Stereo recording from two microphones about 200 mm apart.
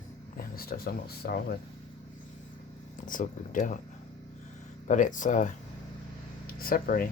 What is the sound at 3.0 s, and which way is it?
Speech, 40° left (ahead or behind).